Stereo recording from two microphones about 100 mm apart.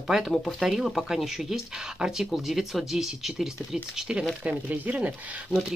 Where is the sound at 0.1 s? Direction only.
Centre (ahead or behind).